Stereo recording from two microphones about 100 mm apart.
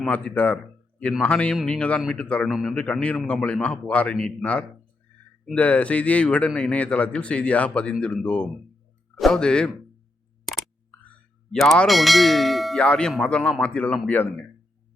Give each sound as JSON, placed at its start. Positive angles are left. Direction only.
{"t": 0.0, "sound": "a man's voice", "side_deg": 15}
{"t": 2.5, "sound": "clang", "side_deg": -5}
{"t": 2.7, "sound": "a man's voice", "side_deg": 10}
{"t": 11.5, "sound": "clang", "side_deg": 5}
{"t": 12.8, "sound": "a man's voice", "side_deg": 10}